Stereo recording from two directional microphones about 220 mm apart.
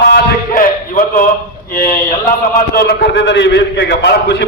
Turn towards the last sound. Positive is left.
turn(degrees=50)  # may be behind; listen again after turning